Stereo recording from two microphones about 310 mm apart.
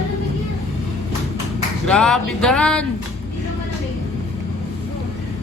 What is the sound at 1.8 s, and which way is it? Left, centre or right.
Music, centre.